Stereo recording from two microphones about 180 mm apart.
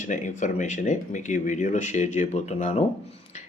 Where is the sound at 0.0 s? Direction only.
45° left (ahead or behind).